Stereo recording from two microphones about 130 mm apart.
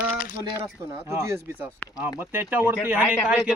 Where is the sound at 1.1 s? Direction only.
20° right (ahead or behind).